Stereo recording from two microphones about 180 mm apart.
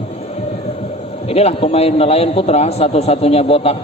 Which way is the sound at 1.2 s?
35° left (ahead or behind).